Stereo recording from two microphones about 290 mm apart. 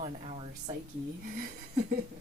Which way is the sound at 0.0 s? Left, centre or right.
Right.